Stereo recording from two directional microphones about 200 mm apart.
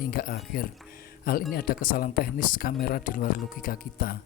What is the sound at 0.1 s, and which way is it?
Speech, 45° left (ahead or behind).